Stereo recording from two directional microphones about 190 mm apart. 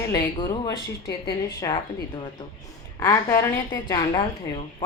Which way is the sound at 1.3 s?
25° left (ahead or behind).